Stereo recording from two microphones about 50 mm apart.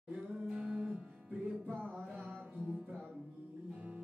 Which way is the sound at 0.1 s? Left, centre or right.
Centre.